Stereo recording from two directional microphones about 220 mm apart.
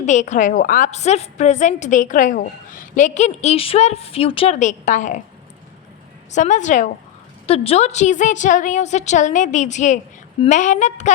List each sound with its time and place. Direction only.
0.0 s a woman's voice: 35° left (ahead or behind)
6.3 s a woman's voice: 35° left (ahead or behind)